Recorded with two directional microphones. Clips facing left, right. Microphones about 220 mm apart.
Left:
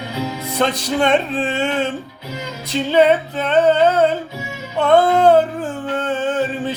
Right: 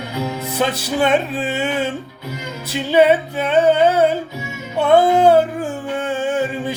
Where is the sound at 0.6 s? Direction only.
5° right (ahead or behind).